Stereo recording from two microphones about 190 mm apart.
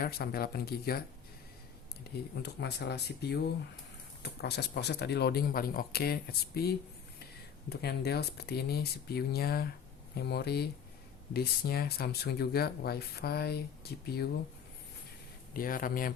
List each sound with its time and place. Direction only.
0.0 s speech: 55° left (ahead or behind)
2.4 s speech: 60° left (ahead or behind)
15.5 s speech: 50° left (ahead or behind)